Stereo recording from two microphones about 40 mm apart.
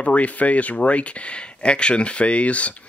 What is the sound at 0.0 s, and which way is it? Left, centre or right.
Speech, left.